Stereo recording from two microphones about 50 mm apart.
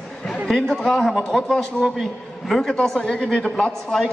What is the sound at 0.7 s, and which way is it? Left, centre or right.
A man's voice, centre.